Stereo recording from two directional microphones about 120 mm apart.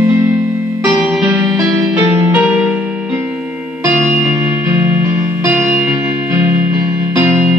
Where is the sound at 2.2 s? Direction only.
15° right (ahead or behind).